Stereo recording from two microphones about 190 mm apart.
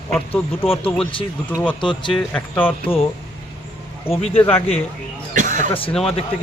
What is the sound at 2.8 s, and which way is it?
Speech, 30° left (ahead or behind).